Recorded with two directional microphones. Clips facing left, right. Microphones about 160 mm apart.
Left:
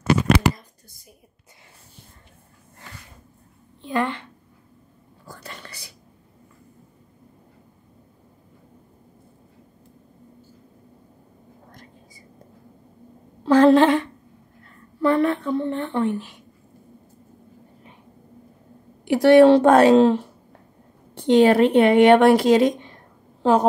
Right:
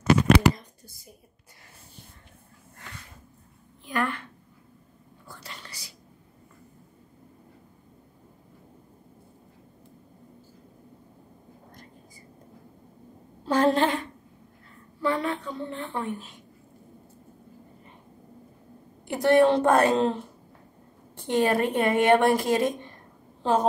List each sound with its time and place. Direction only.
3.8 s a woman's voice: 25° left (ahead or behind)
5.3 s whispering: 50° left (ahead or behind)
13.5 s a sound: 90° left
15.0 s a woman's voice: 60° left (ahead or behind)
19.0 s speech: 85° left